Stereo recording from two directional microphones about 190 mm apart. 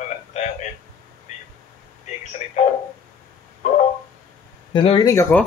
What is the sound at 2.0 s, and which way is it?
Speech, 40° left (ahead or behind).